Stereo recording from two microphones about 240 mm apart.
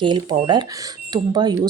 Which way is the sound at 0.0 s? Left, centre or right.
Centre.